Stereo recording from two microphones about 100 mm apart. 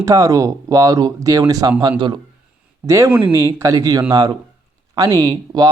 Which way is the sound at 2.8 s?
30° right (ahead or behind).